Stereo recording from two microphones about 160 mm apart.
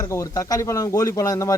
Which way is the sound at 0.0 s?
20° left (ahead or behind).